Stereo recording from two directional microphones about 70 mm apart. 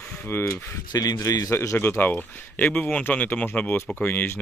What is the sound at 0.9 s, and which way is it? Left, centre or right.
Speech, left.